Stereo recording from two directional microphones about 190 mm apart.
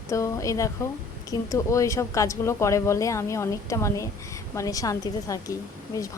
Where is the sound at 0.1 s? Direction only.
15° left (ahead or behind).